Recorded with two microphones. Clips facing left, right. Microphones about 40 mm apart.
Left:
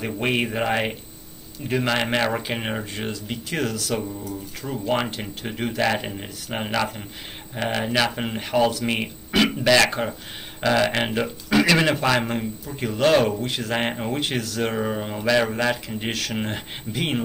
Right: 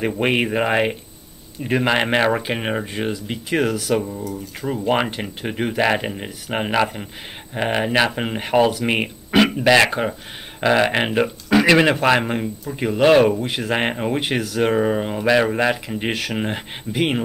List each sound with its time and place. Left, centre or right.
0.0 s speech: right